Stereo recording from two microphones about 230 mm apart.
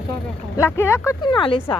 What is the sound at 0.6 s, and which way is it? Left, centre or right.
Speech, centre.